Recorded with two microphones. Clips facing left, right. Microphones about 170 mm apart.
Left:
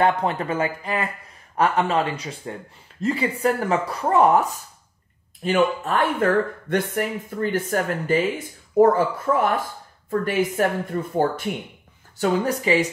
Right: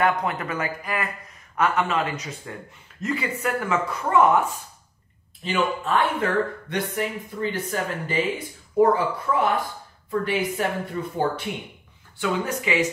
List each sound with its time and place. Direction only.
0.0 s speech: 30° left (ahead or behind)
5.4 s speech: 50° left (ahead or behind)
12.2 s speech: 35° left (ahead or behind)